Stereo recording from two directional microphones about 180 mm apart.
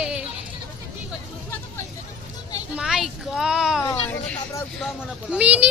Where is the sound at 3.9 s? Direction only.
10° left (ahead or behind).